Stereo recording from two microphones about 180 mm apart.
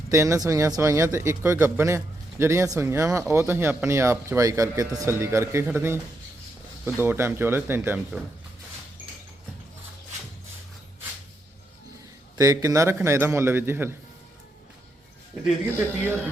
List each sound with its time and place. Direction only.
0.1 s speech: 15° right (ahead or behind)
7.0 s speech: 10° right (ahead or behind)
12.4 s speech: 20° right (ahead or behind)
15.4 s speech: 10° right (ahead or behind)